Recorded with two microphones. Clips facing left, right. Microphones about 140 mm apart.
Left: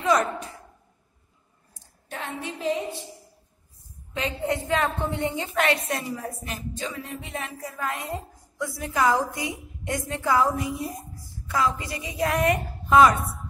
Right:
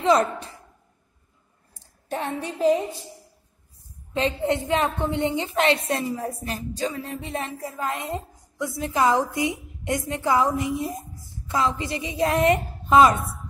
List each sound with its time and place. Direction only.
0.0 s a woman's voice: 25° right (ahead or behind)
2.0 s a woman's voice: 35° right (ahead or behind)
4.1 s a woman's voice: 25° right (ahead or behind)